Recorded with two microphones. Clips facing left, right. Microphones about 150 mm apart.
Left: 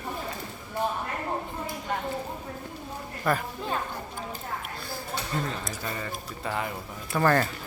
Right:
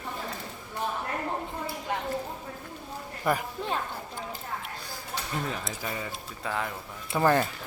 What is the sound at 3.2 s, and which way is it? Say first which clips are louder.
Speech: left 1 dB; 15° right (ahead or behind).